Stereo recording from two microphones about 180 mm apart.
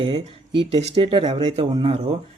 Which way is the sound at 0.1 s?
25° right (ahead or behind).